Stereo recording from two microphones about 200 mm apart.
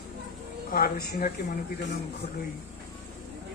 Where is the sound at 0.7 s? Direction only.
45° left (ahead or behind).